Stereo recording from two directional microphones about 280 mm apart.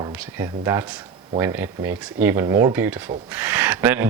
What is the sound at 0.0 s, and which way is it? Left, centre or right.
Speech, centre.